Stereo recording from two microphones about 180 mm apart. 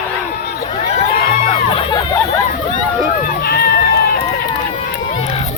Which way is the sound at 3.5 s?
60° left (ahead or behind).